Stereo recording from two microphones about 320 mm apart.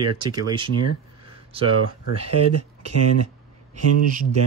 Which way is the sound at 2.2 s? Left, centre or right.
Right.